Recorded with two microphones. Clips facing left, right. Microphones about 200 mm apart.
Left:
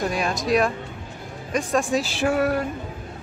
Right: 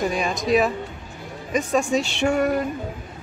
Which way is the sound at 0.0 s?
Centre (ahead or behind).